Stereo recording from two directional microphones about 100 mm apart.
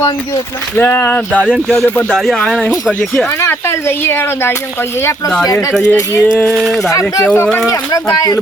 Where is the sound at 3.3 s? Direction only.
30° left (ahead or behind).